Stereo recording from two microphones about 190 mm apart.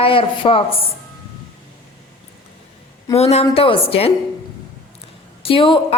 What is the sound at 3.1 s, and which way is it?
Speech, 35° left (ahead or behind).